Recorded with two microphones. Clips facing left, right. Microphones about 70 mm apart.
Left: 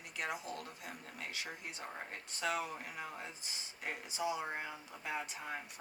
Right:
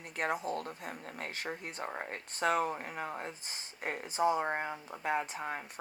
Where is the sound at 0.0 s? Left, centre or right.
Right.